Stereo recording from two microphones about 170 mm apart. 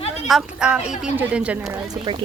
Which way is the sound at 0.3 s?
Centre (ahead or behind).